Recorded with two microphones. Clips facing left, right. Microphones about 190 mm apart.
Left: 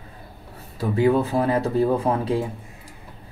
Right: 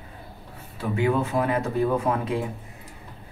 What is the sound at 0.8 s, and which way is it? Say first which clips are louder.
Speech: left 4 dB; 35° left (ahead or behind).